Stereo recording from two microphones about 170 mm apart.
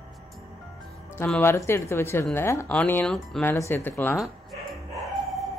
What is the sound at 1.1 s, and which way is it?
Speech, 10° left (ahead or behind).